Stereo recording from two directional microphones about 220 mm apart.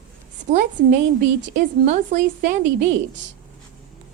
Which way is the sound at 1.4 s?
35° right (ahead or behind).